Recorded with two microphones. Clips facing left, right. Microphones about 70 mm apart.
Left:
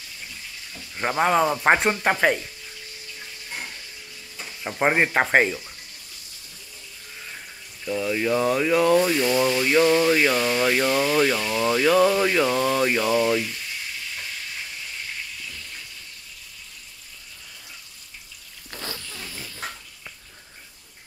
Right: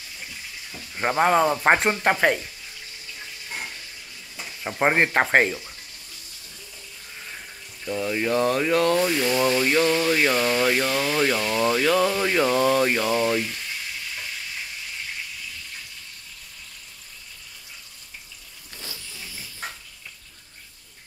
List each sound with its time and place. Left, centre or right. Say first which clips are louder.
0.9 s speech: right 1 dB; centre
4.4 s speech: even; centre
7.8 s speech: left 1 dB; centre
9.4 s a sound: even; centre
9.8 s speech: left 3 dB; centre
10.2 s speech: even; centre
12.4 s speech: right 1 dB; centre
18.7 s dog: left 6 dB; left